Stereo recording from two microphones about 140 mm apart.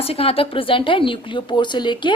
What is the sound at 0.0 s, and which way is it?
A woman's voice, 45° left (ahead or behind).